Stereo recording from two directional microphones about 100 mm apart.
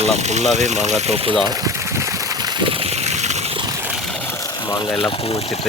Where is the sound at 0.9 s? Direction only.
90° right.